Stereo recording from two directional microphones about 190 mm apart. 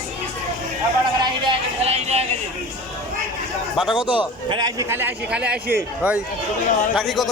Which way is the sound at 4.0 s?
25° left (ahead or behind).